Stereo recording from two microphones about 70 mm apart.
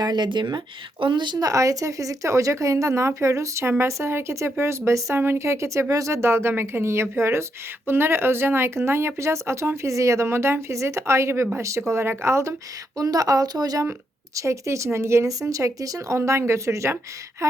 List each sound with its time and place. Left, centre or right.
0.0 s speech: right
5.1 s speech: right
13.0 s speech: right
14.3 s speech: right